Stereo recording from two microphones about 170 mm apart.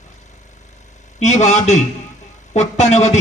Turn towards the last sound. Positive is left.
turn(degrees=40)  # may be behind; listen again after turning